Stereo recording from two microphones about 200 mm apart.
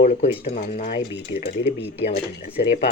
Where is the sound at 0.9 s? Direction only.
55° left (ahead or behind).